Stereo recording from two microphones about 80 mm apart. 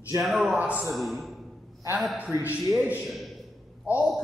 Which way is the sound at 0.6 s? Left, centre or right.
Centre.